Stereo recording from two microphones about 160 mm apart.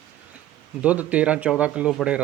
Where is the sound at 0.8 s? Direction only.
10° right (ahead or behind).